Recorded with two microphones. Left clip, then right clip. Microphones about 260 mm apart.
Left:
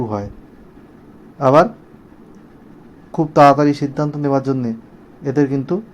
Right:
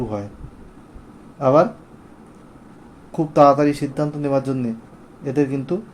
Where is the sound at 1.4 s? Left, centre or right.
Centre.